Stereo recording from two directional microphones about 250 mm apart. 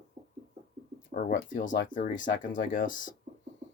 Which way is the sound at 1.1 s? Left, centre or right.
Left.